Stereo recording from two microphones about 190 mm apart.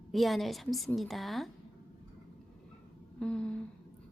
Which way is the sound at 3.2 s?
5° left (ahead or behind).